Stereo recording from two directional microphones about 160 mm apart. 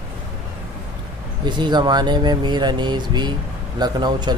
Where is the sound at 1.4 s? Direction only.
30° right (ahead or behind).